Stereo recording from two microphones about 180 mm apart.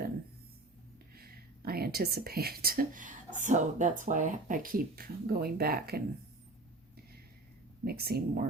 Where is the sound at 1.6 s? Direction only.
60° right (ahead or behind).